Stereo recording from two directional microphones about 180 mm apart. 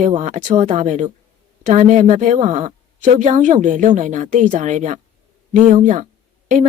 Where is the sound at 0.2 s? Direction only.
40° right (ahead or behind).